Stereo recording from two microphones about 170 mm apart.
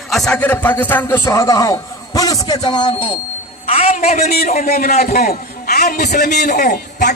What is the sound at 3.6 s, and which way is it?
A man's voice, 35° left (ahead or behind).